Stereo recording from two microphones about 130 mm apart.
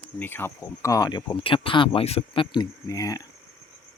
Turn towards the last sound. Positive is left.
turn(degrees=25)  # may be behind; listen again after turning